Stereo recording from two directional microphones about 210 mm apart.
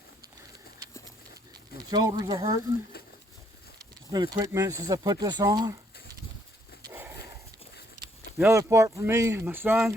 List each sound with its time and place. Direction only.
1.8 s speech: 20° right (ahead or behind)
4.1 s speech: 15° right (ahead or behind)
6.8 s dog: 10° right (ahead or behind)
8.4 s speech: 10° right (ahead or behind)